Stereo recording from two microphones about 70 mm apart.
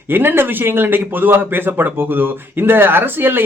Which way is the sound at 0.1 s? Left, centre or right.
Right.